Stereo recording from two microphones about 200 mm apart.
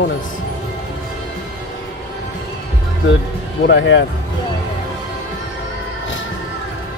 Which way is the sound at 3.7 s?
65° left (ahead or behind).